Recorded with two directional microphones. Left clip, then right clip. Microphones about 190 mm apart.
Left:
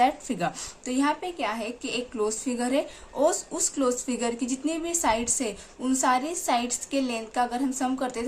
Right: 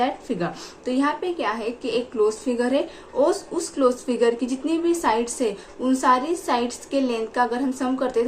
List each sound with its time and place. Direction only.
0.0 s a woman's voice: 30° left (ahead or behind)